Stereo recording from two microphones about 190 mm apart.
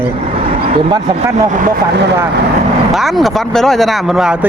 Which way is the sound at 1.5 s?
45° right (ahead or behind).